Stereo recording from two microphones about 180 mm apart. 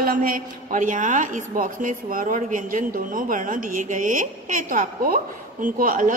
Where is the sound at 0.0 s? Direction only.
50° right (ahead or behind).